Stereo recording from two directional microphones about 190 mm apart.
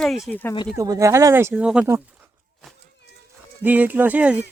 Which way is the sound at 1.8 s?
15° right (ahead or behind).